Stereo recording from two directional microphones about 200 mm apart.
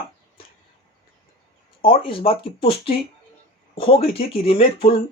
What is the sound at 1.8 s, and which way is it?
Speech, 25° left (ahead or behind).